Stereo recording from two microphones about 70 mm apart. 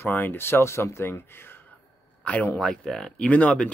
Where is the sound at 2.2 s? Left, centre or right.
Left.